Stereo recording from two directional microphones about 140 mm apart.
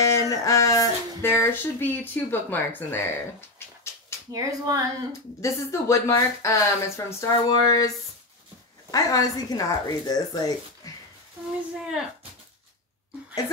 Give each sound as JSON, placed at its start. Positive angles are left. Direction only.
{"t": 0.0, "sound": "speech", "side_deg": 20}
{"t": 4.3, "sound": "speech", "side_deg": -25}
{"t": 5.4, "sound": "speech", "side_deg": 20}
{"t": 8.9, "sound": "speech", "side_deg": 25}
{"t": 10.8, "sound": "a sound", "side_deg": 25}